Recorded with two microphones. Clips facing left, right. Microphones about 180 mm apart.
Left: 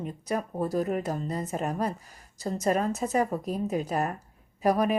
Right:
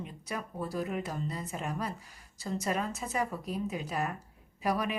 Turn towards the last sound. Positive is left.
turn(degrees=45)  # may be behind; listen again after turning